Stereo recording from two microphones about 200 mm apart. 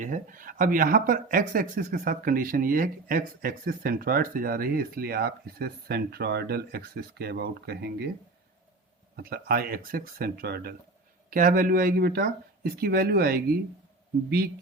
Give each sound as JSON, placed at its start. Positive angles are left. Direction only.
{"t": 0.0, "sound": "speech", "side_deg": -40}
{"t": 9.1, "sound": "speech", "side_deg": -50}